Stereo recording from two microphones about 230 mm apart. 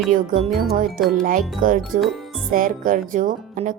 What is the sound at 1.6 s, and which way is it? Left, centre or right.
Speech, right.